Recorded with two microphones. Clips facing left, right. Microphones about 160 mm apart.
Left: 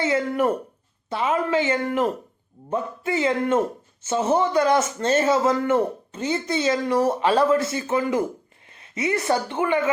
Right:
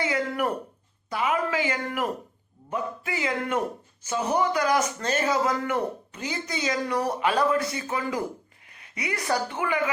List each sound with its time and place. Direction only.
0.0 s a man's voice: 25° left (ahead or behind)